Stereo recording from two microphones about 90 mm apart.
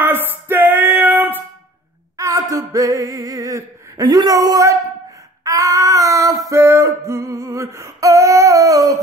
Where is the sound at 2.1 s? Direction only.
40° right (ahead or behind).